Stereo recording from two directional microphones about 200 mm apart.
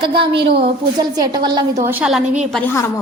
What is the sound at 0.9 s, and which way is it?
Speech, 20° right (ahead or behind).